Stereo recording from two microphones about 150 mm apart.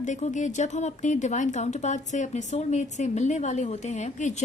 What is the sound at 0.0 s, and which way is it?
A woman's voice, 55° left (ahead or behind).